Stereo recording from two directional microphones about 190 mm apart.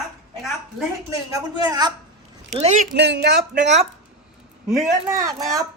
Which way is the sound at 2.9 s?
65° right (ahead or behind).